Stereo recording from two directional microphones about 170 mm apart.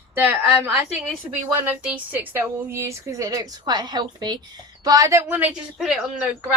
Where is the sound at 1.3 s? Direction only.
10° right (ahead or behind).